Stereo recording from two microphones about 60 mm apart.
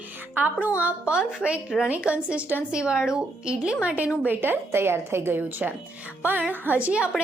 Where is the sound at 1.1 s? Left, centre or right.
Centre.